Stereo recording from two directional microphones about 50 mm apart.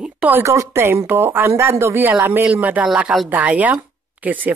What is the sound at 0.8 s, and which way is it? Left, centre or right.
Speech, right.